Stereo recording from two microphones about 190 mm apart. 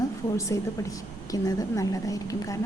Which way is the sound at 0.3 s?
15° left (ahead or behind).